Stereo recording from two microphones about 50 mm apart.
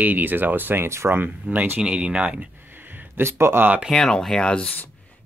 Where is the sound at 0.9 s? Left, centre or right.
Right.